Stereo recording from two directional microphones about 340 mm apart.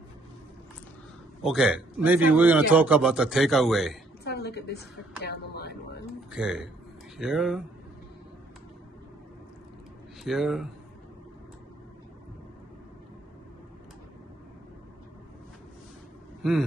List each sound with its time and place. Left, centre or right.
1.4 s a man's voice: centre
4.2 s a woman's voice: left
6.3 s a man's voice: centre
10.2 s a man's voice: centre